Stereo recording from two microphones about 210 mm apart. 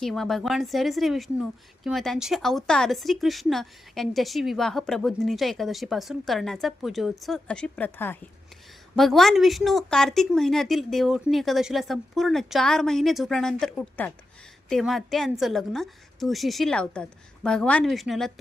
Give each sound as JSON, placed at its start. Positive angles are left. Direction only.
{"t": 0.0, "sound": "a woman's voice", "side_deg": 0}